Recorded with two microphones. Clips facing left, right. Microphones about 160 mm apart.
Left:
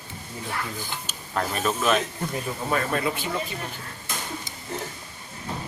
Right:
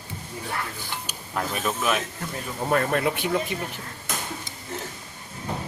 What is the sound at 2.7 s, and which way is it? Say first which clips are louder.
Speech: right 3 dB; 55° right (ahead or behind).